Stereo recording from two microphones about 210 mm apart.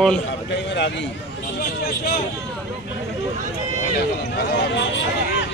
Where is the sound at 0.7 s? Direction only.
55° left (ahead or behind).